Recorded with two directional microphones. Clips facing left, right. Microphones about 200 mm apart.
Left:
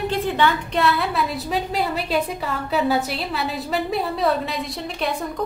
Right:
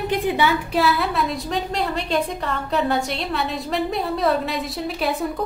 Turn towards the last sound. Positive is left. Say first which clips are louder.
# right 2 dB
turn(degrees=-5)  # may be behind; listen again after turning